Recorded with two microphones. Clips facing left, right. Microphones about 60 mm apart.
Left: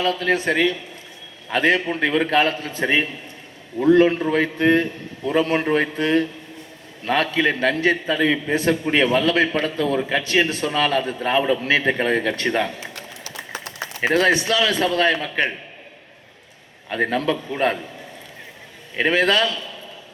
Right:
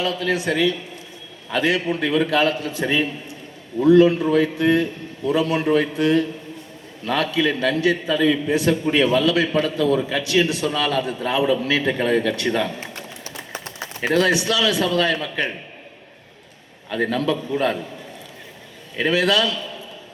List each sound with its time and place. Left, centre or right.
0.0 s a man's voice: left
13.7 s a man's voice: left
16.9 s a man's voice: left
18.9 s a man's voice: left